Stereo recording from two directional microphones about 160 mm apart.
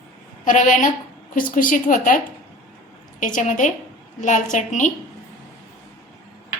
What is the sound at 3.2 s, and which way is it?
A woman's voice, 50° left (ahead or behind).